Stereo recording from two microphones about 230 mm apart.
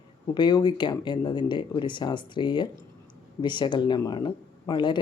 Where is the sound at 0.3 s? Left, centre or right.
Centre.